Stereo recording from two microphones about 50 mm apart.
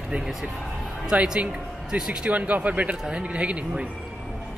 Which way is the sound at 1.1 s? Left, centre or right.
Right.